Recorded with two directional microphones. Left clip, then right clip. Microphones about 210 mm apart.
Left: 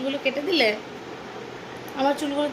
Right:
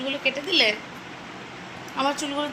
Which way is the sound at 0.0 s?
15° left (ahead or behind).